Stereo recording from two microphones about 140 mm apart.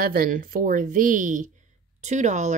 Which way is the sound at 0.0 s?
90° right.